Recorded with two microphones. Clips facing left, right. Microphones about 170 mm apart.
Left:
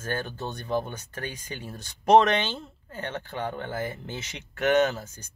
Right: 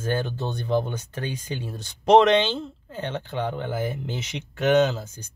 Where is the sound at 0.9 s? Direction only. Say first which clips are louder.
Right 5 dB; 25° right (ahead or behind).